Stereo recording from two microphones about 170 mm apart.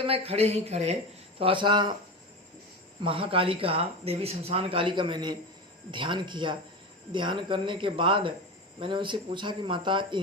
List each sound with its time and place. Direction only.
0.0 s speech: 35° right (ahead or behind)
3.0 s speech: 30° right (ahead or behind)